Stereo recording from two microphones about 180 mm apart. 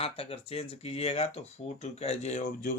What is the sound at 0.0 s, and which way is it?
Speech, 30° left (ahead or behind).